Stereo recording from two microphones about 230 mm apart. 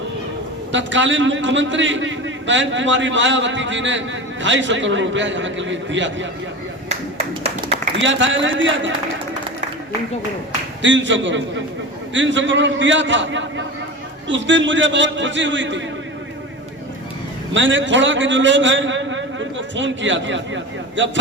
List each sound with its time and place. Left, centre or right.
0.7 s a man's voice: right
7.9 s a man's voice: right
10.8 s a man's voice: right
17.5 s a man's voice: right